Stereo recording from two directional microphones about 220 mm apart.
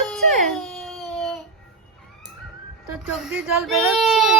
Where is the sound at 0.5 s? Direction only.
Centre (ahead or behind).